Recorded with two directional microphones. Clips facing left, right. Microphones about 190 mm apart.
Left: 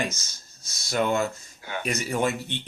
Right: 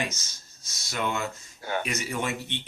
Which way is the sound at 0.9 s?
40° left (ahead or behind).